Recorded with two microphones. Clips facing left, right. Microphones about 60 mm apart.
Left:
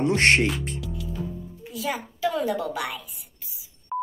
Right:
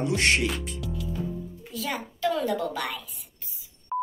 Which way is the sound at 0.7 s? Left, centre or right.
Centre.